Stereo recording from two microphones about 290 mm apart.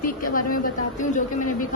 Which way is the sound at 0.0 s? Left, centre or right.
Left.